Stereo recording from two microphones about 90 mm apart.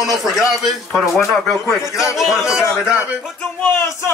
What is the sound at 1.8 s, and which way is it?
Speech, 35° left (ahead or behind).